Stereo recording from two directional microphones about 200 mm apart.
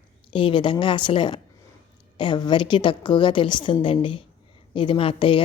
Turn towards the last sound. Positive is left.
turn(degrees=25)  # may be behind; listen again after turning